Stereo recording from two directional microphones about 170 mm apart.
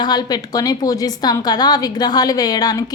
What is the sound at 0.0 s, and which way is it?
A woman's voice, 25° left (ahead or behind).